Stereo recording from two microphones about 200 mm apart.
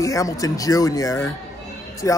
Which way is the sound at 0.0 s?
15° left (ahead or behind).